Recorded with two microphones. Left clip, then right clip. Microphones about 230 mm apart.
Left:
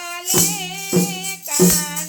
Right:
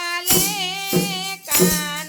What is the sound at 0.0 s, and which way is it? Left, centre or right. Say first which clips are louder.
Music: even; right.